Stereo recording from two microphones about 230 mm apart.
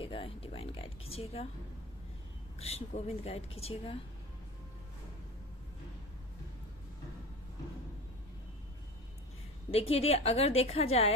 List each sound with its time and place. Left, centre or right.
0.0 s speech: left
2.6 s speech: left
9.7 s speech: left